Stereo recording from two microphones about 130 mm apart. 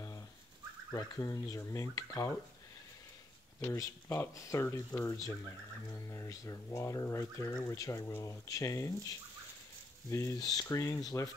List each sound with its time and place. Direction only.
0.9 s speech: 25° left (ahead or behind)
3.6 s speech: 20° left (ahead or behind)